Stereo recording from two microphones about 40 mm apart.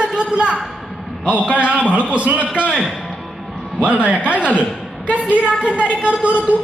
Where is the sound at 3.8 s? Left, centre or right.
Right.